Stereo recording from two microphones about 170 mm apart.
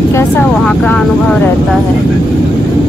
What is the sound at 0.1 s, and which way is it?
Speech, 15° left (ahead or behind).